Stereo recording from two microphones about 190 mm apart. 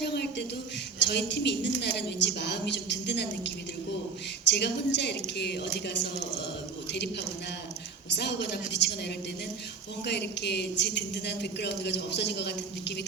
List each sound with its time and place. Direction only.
0.0 s a sound: 60° left (ahead or behind)
0.9 s a man's voice: 65° left (ahead or behind)
8.1 s a man's voice: 65° left (ahead or behind)
10.1 s a man's voice: 60° left (ahead or behind)